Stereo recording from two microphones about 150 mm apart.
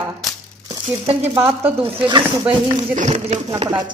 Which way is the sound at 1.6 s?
30° right (ahead or behind).